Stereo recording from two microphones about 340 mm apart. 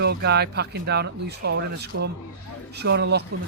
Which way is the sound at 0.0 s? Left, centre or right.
Right.